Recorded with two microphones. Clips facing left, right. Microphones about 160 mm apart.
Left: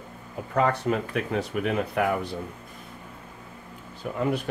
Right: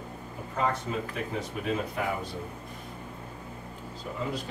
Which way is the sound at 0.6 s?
70° left (ahead or behind).